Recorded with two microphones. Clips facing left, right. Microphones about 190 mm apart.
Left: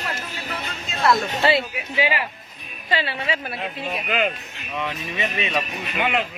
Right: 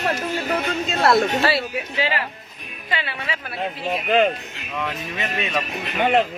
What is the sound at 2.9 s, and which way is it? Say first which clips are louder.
Speech: left 3 dB; 30° left (ahead or behind).